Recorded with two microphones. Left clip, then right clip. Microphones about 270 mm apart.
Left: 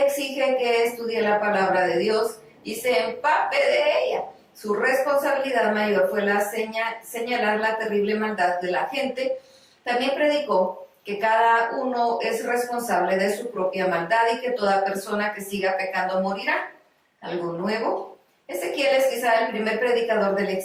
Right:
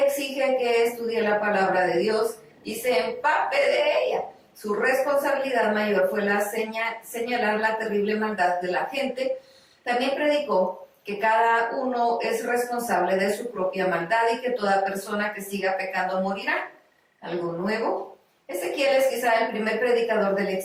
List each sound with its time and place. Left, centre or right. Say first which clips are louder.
0.4 s a woman's voice: left 1 dB; centre
10.4 s speech: left 1 dB; left
11.0 s a woman's voice: left 1 dB; centre
11.7 s speech: left 1 dB; centre
12.1 s a woman's voice: left 1 dB; centre
16.0 s speech: left 2 dB; centre
16.3 s a woman's voice: left 2 dB; centre
18.4 s a woman's voice: left 1 dB; centre